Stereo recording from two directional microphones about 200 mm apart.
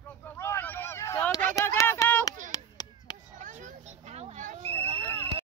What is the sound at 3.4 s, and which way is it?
Children playing, 40° right (ahead or behind).